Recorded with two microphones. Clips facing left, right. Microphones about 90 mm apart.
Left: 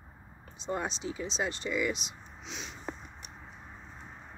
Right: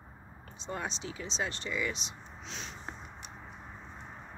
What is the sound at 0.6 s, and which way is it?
Speech, 15° left (ahead or behind).